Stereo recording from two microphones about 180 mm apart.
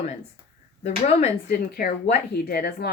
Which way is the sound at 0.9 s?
35° left (ahead or behind).